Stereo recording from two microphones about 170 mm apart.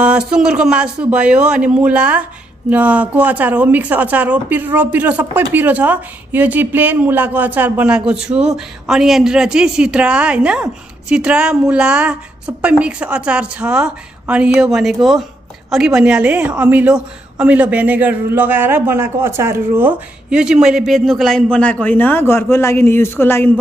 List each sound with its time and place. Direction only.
0.0 s a woman's voice: 5° right (ahead or behind); by 23.5 s 15° left (ahead or behind)